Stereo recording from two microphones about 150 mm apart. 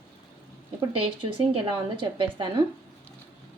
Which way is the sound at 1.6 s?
35° right (ahead or behind).